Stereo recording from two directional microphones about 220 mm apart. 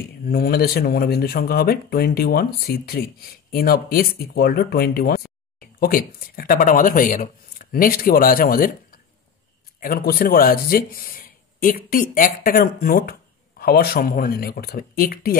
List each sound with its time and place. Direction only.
0.2 s speech: 40° left (ahead or behind)